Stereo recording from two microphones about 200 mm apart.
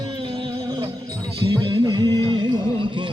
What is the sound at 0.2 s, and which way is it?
Music, 25° right (ahead or behind).